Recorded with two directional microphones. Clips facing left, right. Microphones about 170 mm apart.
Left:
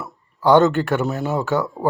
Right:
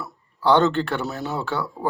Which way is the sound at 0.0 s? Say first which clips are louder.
Left 3 dB; 10° left (ahead or behind).